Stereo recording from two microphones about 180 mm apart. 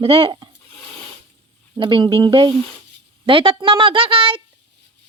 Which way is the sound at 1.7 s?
25° right (ahead or behind).